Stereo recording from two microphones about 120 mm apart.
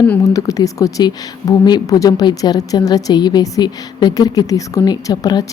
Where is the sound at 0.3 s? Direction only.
30° left (ahead or behind).